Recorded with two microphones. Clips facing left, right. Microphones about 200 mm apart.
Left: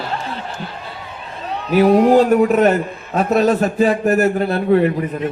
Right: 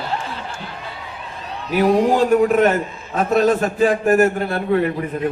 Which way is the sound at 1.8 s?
50° left (ahead or behind).